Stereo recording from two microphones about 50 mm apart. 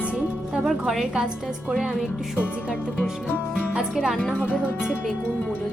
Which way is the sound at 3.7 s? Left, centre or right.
Centre.